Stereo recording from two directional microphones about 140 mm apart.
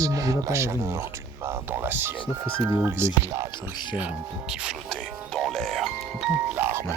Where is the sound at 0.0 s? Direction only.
25° right (ahead or behind).